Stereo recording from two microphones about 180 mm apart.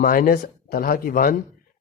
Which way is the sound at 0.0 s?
55° left (ahead or behind).